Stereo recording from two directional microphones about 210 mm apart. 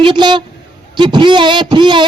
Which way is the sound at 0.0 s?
20° right (ahead or behind).